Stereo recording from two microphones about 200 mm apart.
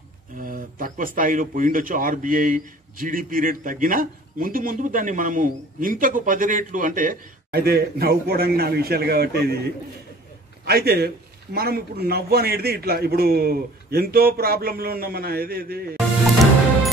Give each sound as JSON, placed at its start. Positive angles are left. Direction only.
{"t": 0.4, "sound": "a man's voice", "side_deg": -45}